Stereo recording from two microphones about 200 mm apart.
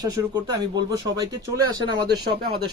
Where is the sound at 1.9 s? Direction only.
55° right (ahead or behind).